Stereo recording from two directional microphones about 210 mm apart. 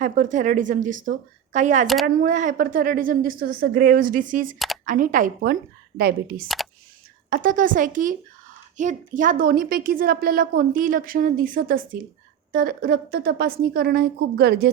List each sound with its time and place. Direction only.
0.0 s a woman's voice: 35° right (ahead or behind)